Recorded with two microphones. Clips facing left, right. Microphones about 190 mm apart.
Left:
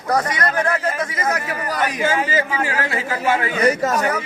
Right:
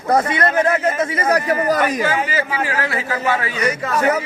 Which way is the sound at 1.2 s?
35° right (ahead or behind).